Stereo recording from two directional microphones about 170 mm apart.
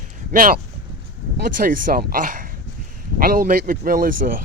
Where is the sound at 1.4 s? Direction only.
55° right (ahead or behind).